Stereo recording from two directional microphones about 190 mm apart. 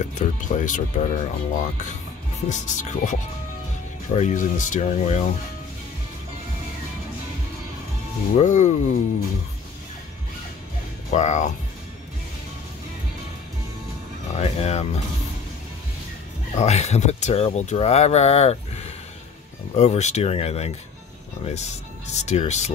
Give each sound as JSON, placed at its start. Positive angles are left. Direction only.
{"t": 0.0, "sound": "speech", "side_deg": 40}
{"t": 8.4, "sound": "speech", "side_deg": 40}
{"t": 11.1, "sound": "speech", "side_deg": 40}
{"t": 14.4, "sound": "speech", "side_deg": 35}
{"t": 16.5, "sound": "speech", "side_deg": 35}